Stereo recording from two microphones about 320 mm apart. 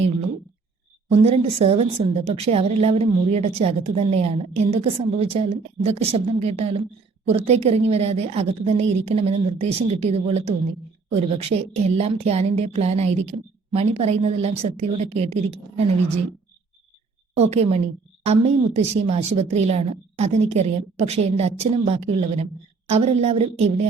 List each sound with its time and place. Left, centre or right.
1.1 s a woman's voice: centre
17.3 s a woman's voice: centre